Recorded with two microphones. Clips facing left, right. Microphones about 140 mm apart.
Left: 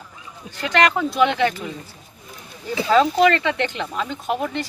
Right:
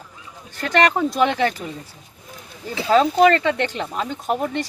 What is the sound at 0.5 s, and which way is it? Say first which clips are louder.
Speech: right 1 dB; 45° right (ahead or behind).